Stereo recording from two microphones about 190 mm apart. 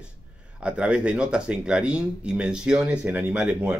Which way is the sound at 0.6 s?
5° right (ahead or behind).